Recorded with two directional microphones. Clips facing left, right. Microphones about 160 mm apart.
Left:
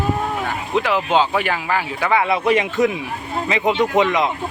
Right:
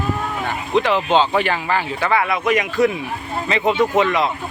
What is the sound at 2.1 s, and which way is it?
A man's voice, 25° left (ahead or behind).